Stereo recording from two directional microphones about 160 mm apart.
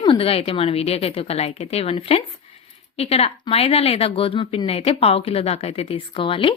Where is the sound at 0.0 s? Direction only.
35° left (ahead or behind).